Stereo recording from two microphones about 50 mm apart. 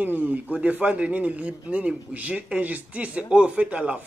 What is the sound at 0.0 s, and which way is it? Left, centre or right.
Speech, right.